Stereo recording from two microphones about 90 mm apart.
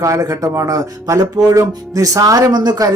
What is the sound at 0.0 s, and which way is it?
Speech, 35° right (ahead or behind).